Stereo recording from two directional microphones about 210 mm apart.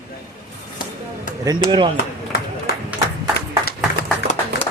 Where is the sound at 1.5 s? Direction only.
20° right (ahead or behind).